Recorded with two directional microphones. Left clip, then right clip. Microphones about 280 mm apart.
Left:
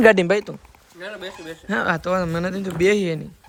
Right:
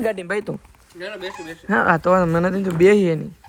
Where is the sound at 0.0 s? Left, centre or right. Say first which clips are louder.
Left 10 dB; left.